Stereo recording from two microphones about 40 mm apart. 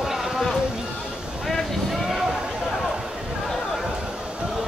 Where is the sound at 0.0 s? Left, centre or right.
Centre.